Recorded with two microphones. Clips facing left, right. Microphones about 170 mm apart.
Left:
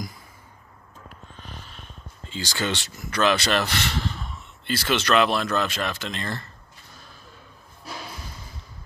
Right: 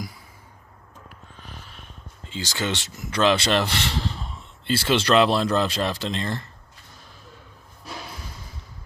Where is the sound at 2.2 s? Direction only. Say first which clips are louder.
Even; 20° right (ahead or behind).